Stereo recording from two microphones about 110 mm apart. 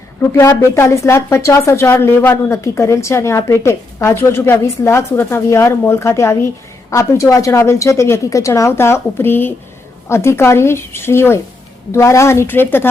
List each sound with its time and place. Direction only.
0.3 s speech: 25° left (ahead or behind)